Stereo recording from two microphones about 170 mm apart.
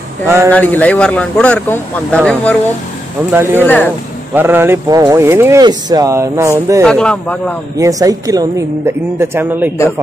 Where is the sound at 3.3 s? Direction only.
15° right (ahead or behind).